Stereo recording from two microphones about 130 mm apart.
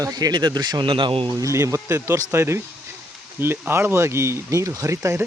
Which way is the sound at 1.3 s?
25° right (ahead or behind).